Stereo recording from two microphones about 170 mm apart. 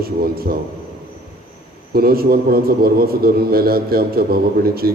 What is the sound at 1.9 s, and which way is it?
A man's voice, 60° right (ahead or behind).